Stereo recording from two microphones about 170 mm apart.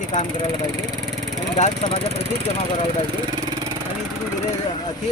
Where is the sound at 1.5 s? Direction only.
45° left (ahead or behind).